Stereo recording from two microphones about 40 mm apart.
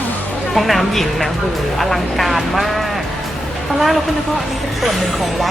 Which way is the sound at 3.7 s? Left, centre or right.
Centre.